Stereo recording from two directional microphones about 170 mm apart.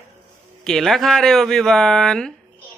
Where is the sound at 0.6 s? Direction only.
Centre (ahead or behind).